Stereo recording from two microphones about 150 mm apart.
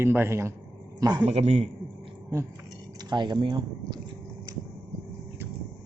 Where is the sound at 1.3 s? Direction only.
50° right (ahead or behind).